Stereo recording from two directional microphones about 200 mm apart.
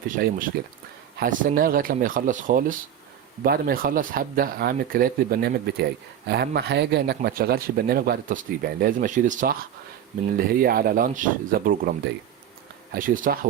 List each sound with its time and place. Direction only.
0.6 s speech: 50° right (ahead or behind)
12.9 s speech: 45° right (ahead or behind)